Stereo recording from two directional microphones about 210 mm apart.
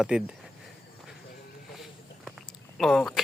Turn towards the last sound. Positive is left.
turn(degrees=0)  # may be behind; listen again after turning